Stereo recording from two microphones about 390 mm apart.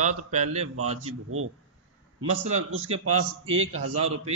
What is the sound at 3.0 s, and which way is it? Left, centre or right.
Speech, right.